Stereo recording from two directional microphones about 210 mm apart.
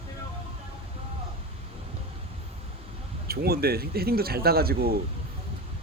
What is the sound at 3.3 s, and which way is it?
Speech, 50° right (ahead or behind).